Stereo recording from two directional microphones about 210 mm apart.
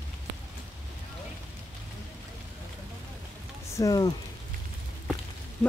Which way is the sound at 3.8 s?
15° left (ahead or behind).